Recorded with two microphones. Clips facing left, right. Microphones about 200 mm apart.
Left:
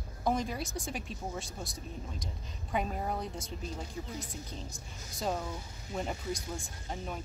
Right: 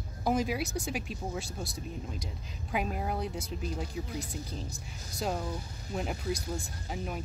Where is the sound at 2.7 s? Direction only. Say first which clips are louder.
Right 1 dB; 5° right (ahead or behind).